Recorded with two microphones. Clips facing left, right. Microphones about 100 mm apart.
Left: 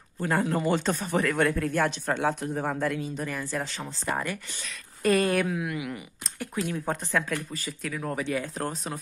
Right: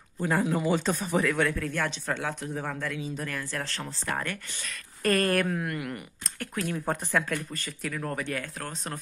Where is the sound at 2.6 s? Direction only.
15° left (ahead or behind).